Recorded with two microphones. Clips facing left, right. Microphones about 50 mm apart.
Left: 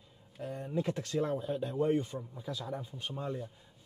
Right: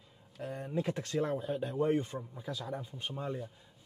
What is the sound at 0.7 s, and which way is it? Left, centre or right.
Speech, centre.